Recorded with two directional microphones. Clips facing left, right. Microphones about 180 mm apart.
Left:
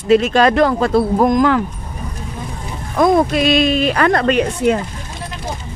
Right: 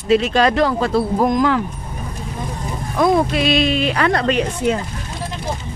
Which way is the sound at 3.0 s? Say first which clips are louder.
Left 3 dB; 45° left (ahead or behind).